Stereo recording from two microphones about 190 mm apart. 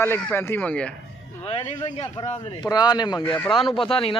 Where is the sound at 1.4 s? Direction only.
25° left (ahead or behind).